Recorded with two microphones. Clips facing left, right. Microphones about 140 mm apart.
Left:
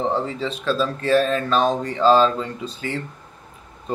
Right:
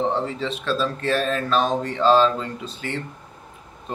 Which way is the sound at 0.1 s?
Centre (ahead or behind).